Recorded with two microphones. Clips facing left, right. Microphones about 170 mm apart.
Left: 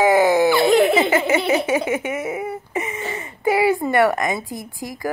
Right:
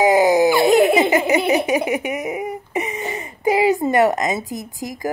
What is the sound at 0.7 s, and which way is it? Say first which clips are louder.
Giggle: right 2 dB; 40° right (ahead or behind).